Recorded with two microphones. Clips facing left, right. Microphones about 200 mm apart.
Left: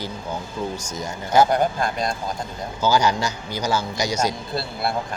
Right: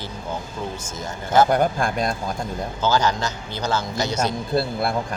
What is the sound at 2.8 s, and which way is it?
A man's voice, 10° left (ahead or behind).